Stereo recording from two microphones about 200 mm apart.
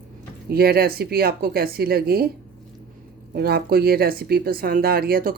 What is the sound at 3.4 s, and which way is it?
Speech, 50° right (ahead or behind).